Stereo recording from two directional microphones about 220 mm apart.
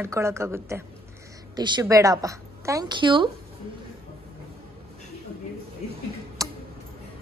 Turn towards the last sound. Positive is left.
turn(degrees=-15)  # may be behind; listen again after turning